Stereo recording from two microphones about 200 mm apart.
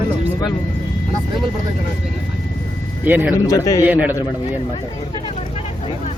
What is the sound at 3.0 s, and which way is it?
Speech, 10° right (ahead or behind).